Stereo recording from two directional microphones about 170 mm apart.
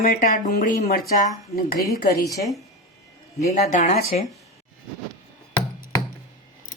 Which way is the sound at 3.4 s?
40° left (ahead or behind).